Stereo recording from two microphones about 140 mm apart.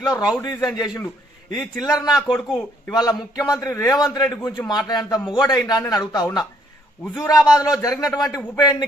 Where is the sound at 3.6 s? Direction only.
25° left (ahead or behind).